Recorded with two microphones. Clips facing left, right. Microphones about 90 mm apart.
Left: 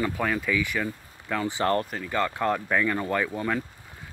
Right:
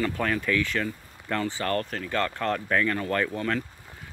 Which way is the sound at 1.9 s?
5° left (ahead or behind).